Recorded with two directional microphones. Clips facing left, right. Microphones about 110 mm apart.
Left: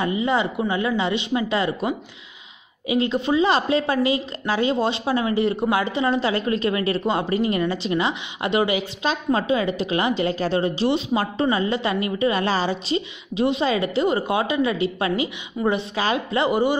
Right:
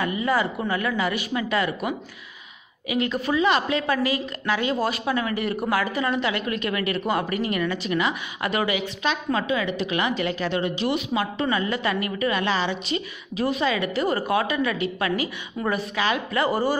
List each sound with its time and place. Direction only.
0.0 s a woman's voice: 25° left (ahead or behind)
16.4 s a woman's voice: 20° left (ahead or behind)